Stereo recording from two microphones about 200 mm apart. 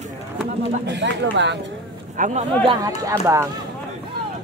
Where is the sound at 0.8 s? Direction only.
65° right (ahead or behind).